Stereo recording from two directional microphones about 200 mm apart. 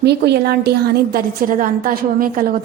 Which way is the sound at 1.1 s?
45° right (ahead or behind).